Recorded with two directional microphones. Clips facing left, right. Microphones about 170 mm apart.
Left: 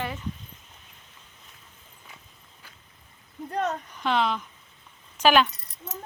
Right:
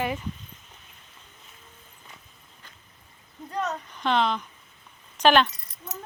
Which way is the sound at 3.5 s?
55° left (ahead or behind).